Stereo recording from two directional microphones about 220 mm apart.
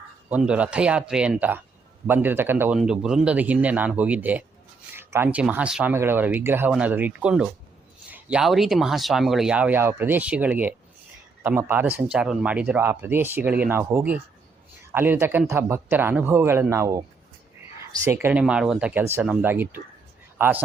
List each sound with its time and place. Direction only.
0.3 s speech: 5° right (ahead or behind)